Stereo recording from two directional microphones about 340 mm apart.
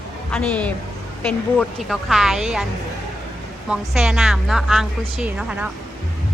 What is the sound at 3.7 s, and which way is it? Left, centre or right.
A woman's voice, centre.